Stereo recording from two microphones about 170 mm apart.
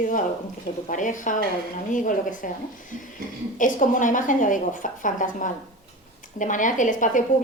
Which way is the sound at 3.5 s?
50° left (ahead or behind).